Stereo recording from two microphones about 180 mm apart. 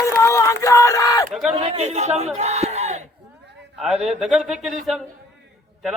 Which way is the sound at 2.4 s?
40° right (ahead or behind).